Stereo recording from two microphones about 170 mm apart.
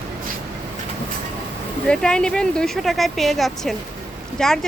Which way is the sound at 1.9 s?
5° left (ahead or behind).